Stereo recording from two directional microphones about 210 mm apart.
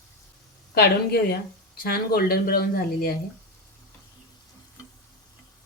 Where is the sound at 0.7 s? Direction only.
50° left (ahead or behind).